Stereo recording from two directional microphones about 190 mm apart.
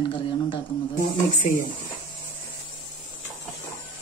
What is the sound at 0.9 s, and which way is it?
Speech, 40° left (ahead or behind).